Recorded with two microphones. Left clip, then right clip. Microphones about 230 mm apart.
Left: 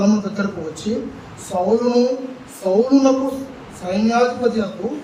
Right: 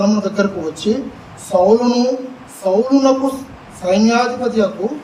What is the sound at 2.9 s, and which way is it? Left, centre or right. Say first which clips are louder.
A man's voice: right 2 dB; right.